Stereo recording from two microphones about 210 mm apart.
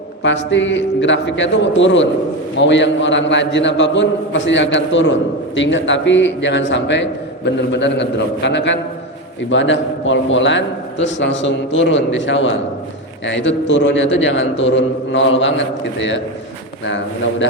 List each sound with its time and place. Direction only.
0.2 s a man's voice: 60° left (ahead or behind)